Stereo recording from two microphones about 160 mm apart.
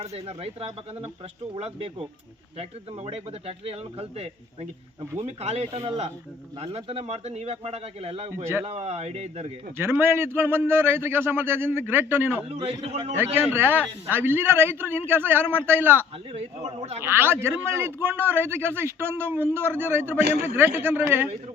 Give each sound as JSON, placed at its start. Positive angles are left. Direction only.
{"t": 0.0, "sound": "speech", "side_deg": -40}
{"t": 9.7, "sound": "a man's voice", "side_deg": -15}
{"t": 12.5, "sound": "speech", "side_deg": -40}
{"t": 13.1, "sound": "a man's voice", "side_deg": -15}
{"t": 16.6, "sound": "speech", "side_deg": -40}
{"t": 17.0, "sound": "a man's voice", "side_deg": -15}